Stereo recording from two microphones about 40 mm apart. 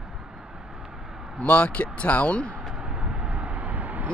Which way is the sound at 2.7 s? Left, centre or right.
Right.